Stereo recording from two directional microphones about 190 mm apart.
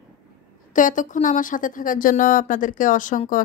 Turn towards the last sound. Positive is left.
turn(degrees=45)  # may be behind; listen again after turning